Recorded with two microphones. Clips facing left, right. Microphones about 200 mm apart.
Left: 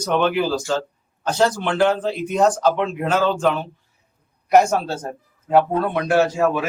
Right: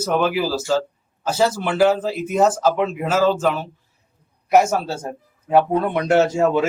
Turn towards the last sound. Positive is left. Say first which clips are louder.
# right 2 dB
turn(degrees=-25)  # may be behind; listen again after turning